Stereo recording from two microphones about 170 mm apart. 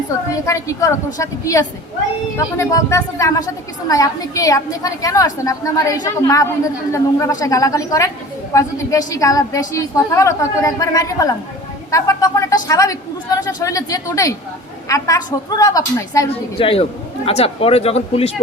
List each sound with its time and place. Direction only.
0.4 s a woman's voice: 20° left (ahead or behind)
16.6 s speech: 35° left (ahead or behind)